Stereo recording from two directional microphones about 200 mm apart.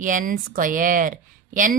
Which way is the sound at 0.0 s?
40° right (ahead or behind).